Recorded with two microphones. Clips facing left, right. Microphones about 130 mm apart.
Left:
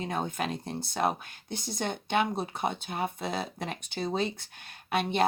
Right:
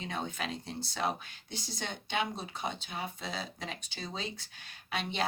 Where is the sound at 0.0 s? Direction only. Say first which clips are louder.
Left 6 dB; 45° left (ahead or behind).